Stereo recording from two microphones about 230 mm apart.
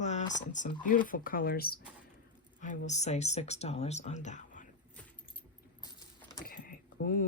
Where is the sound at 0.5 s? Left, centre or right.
Left.